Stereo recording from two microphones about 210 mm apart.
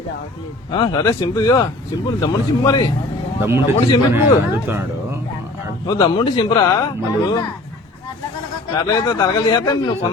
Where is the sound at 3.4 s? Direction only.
10° right (ahead or behind).